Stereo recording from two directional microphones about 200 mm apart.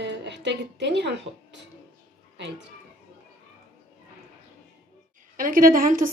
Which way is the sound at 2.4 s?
60° right (ahead or behind).